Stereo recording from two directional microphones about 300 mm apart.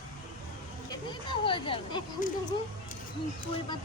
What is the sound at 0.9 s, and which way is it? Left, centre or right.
Speech, centre.